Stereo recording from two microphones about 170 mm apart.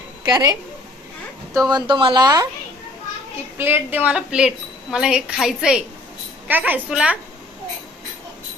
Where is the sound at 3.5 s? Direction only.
10° right (ahead or behind).